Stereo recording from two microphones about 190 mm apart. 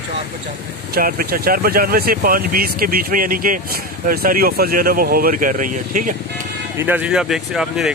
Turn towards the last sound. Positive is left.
turn(degrees=-5)  # may be behind; listen again after turning